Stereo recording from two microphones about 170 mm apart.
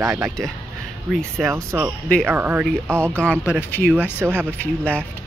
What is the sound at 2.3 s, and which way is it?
Speech, 10° right (ahead or behind).